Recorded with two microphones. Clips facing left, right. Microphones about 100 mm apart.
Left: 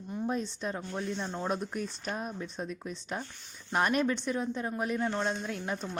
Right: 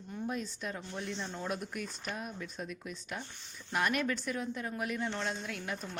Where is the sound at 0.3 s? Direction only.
30° left (ahead or behind).